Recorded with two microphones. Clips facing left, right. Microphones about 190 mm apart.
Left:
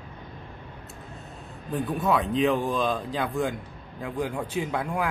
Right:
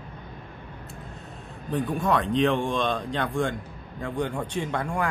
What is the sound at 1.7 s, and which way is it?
A man's voice, 5° left (ahead or behind).